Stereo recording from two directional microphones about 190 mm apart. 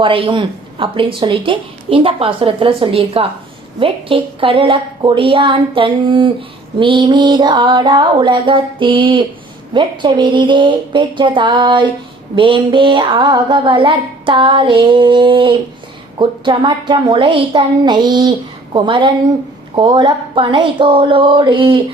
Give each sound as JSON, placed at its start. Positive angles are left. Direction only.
{"t": 0.0, "sound": "a woman's voice", "side_deg": -25}